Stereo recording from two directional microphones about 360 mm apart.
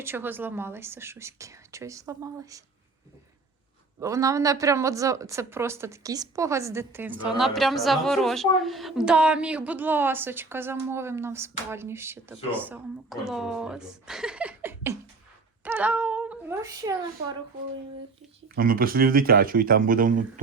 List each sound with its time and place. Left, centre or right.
0.0 s a woman's voice: centre
4.0 s a woman's voice: centre
18.5 s speech: right